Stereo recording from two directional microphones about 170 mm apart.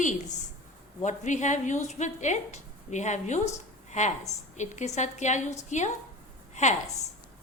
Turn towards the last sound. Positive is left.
turn(degrees=40)  # may be behind; listen again after turning